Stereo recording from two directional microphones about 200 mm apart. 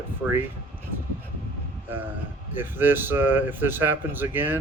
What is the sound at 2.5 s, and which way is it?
Speech, 10° right (ahead or behind).